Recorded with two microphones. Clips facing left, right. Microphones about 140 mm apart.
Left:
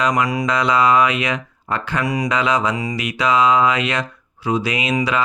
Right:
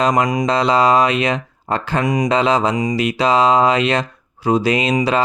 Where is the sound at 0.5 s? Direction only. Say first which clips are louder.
Right 2 dB; 30° right (ahead or behind).